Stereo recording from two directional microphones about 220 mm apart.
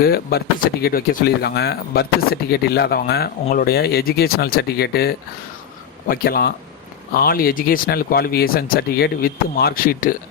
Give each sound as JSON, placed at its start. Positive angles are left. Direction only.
{"t": 0.0, "sound": "speech", "side_deg": 45}